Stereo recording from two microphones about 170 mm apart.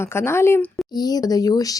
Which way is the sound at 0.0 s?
15° left (ahead or behind).